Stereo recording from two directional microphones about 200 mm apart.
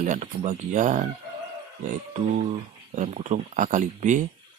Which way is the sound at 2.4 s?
35° right (ahead or behind).